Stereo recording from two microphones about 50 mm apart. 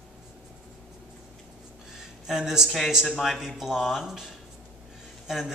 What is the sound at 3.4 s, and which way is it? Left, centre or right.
Dishes, centre.